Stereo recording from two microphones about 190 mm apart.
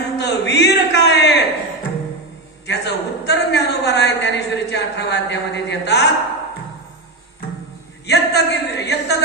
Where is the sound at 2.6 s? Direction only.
65° left (ahead or behind).